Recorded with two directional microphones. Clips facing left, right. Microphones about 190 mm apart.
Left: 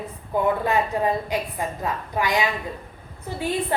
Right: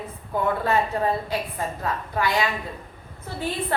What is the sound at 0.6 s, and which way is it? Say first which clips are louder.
A woman's voice: left 1 dB; 15° left (ahead or behind).